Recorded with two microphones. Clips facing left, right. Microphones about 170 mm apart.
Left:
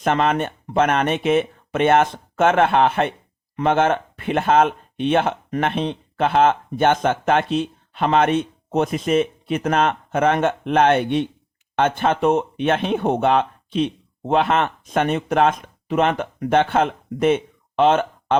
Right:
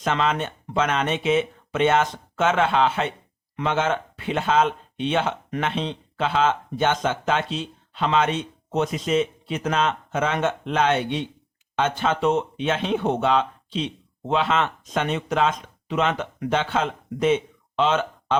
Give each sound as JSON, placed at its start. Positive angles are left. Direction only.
{"t": 0.0, "sound": "speech", "side_deg": 55}